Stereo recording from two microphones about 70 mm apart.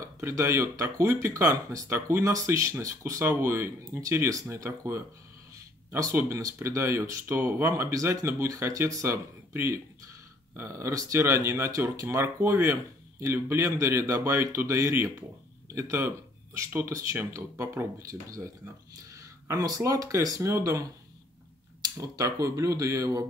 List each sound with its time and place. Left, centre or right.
0.0 s speech: right
1.9 s speech: right
4.6 s speech: right
5.9 s speech: right
19.1 s speech: right
22.0 s speech: right